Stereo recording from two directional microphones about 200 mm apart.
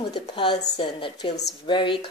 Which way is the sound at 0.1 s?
25° left (ahead or behind).